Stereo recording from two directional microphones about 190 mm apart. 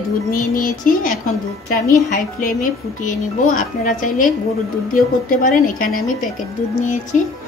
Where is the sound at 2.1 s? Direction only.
45° left (ahead or behind).